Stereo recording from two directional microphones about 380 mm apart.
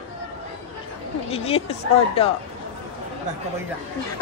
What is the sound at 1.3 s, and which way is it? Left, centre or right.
Speech, centre.